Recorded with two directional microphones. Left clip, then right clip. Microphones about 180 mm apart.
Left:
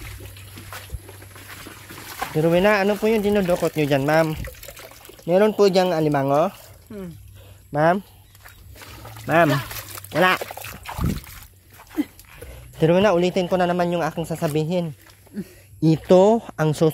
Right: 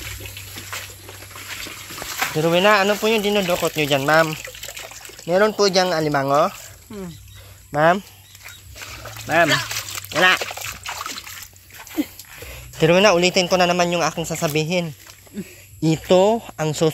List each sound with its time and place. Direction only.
2.3 s speech: 35° left (ahead or behind)
4.3 s water: 20° left (ahead or behind)
5.3 s speech: 50° left (ahead or behind)
7.7 s speech: 25° left (ahead or behind)
9.0 s a sound: 45° left (ahead or behind)
10.1 s speech: 40° left (ahead or behind)
10.4 s dog: 25° left (ahead or behind)
10.8 s trickle: 40° left (ahead or behind)
12.4 s a man's voice: 25° left (ahead or behind)
15.8 s speech: 35° left (ahead or behind)